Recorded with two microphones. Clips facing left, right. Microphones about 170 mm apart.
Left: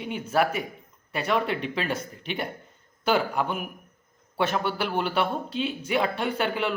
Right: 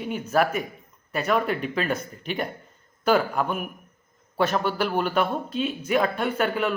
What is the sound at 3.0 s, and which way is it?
Speech, 40° right (ahead or behind).